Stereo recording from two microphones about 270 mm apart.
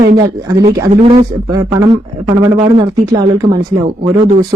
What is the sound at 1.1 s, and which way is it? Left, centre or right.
Speech, centre.